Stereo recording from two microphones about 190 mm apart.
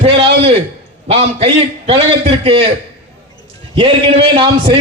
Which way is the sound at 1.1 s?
30° right (ahead or behind).